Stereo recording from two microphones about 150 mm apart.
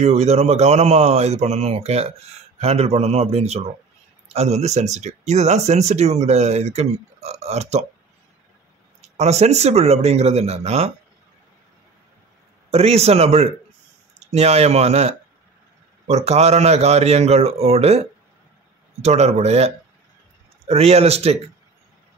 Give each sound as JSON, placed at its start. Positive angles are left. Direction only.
{"t": 0.0, "sound": "speech", "side_deg": -45}
{"t": 9.0, "sound": "speech", "side_deg": -45}
{"t": 12.7, "sound": "speech", "side_deg": -45}